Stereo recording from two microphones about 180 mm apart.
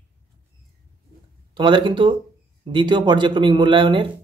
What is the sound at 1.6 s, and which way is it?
Speech, 25° right (ahead or behind).